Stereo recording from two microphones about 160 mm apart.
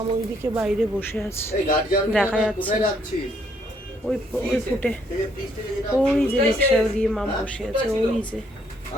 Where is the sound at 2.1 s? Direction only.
10° left (ahead or behind).